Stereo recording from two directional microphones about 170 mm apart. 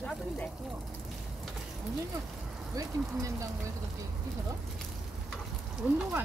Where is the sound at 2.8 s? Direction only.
20° right (ahead or behind).